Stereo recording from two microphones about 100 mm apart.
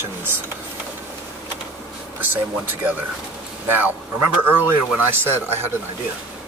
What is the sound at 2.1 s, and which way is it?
Speech, 20° right (ahead or behind).